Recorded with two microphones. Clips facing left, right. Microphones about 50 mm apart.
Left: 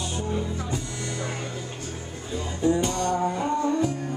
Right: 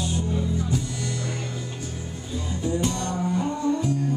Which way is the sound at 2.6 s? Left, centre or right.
Left.